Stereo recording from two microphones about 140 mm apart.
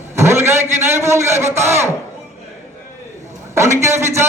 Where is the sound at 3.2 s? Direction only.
20° right (ahead or behind).